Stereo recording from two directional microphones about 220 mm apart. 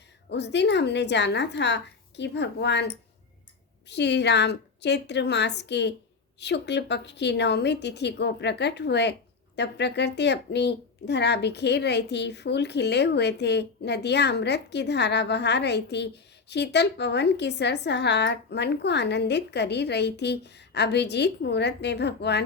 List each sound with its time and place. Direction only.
0.3 s speech: 50° left (ahead or behind)
3.8 s speech: 50° left (ahead or behind)